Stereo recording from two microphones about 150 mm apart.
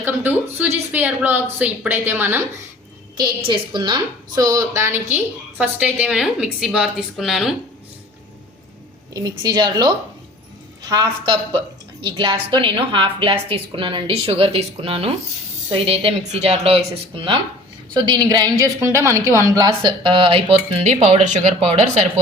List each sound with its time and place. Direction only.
0.0 s a woman's voice: 10° right (ahead or behind)
3.2 s a woman's voice: 30° right (ahead or behind); by 7.5 s centre (ahead or behind)
9.1 s a woman's voice: 25° right (ahead or behind); by 21.8 s 45° right (ahead or behind)